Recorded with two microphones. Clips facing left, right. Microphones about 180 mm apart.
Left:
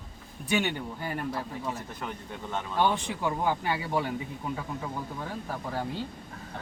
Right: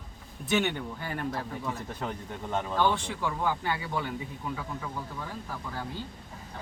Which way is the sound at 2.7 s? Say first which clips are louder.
Left 2 dB; 15° left (ahead or behind).